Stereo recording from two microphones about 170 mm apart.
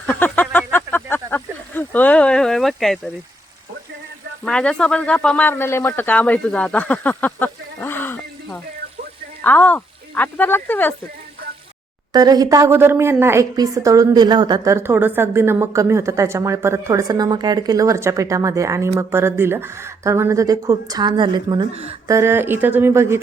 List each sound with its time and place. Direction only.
0.0 s a sound: 10° left (ahead or behind)
4.4 s speech: 5° left (ahead or behind)
9.4 s speech: 10° left (ahead or behind)
12.1 s a woman's voice: 20° right (ahead or behind)
22.0 s a woman's voice: 15° right (ahead or behind)